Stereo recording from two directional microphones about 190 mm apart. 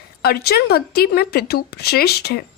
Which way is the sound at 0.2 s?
55° left (ahead or behind).